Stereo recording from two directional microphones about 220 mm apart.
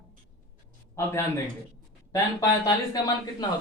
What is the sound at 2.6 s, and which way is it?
Speech, 15° left (ahead or behind).